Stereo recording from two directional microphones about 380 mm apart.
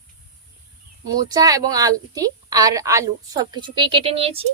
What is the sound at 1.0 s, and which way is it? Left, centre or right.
A woman's voice, centre.